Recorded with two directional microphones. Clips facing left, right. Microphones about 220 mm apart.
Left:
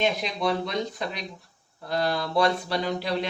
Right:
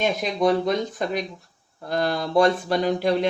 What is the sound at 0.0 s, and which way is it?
Speech, 45° right (ahead or behind).